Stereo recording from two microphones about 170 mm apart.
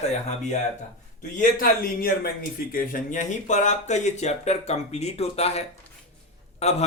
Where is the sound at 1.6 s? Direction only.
55° left (ahead or behind).